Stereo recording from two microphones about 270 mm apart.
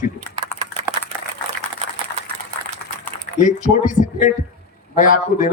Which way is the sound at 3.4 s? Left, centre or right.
Left.